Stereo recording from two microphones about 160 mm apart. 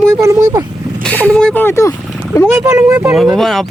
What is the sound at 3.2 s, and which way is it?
Speech, centre (ahead or behind).